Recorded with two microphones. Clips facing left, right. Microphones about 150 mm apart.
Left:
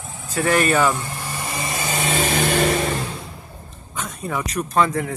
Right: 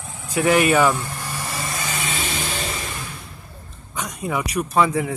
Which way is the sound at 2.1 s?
60° left (ahead or behind).